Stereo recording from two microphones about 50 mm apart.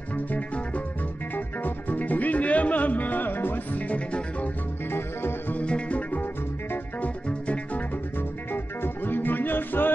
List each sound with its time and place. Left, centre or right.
1.3 s music: left
3.9 s music: left
5.5 s music: left
7.2 s music: left
8.8 s music: left